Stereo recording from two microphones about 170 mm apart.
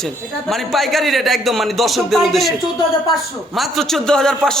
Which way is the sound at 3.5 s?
Centre (ahead or behind).